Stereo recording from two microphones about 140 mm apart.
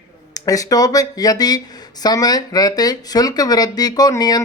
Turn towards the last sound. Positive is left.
turn(degrees=30)  # may be behind; listen again after turning